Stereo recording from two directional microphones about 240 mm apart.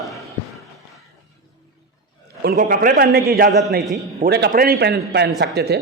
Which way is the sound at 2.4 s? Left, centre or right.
Right.